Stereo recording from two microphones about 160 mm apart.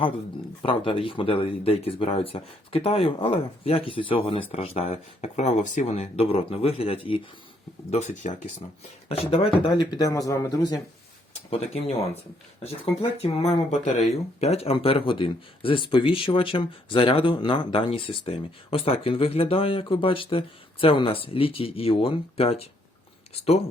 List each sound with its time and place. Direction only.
0.6 s speech: 35° left (ahead or behind); by 8.4 s 50° left (ahead or behind)
9.8 s speech: 20° left (ahead or behind)
11.5 s speech: 40° left (ahead or behind)